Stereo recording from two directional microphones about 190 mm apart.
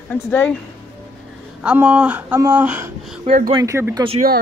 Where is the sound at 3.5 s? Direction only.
15° right (ahead or behind).